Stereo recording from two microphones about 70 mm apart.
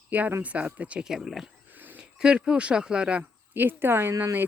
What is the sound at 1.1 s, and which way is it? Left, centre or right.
Speech, centre.